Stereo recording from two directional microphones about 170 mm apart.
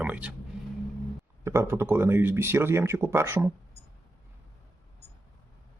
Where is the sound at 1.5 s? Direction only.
15° right (ahead or behind).